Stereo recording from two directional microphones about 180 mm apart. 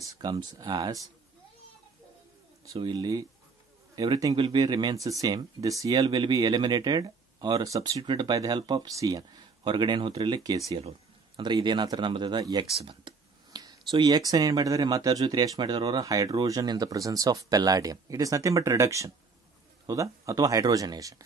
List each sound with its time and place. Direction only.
0.0 s speech: 20° right (ahead or behind)
2.6 s speech: 20° right (ahead or behind)